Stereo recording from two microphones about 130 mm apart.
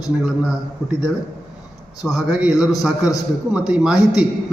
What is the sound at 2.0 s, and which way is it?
A man's voice, 5° right (ahead or behind).